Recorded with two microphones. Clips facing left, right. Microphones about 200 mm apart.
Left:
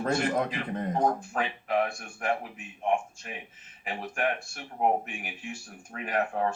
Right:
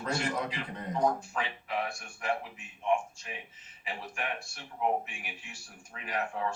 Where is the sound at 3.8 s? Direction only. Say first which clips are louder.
Left 7 dB; 50° left (ahead or behind).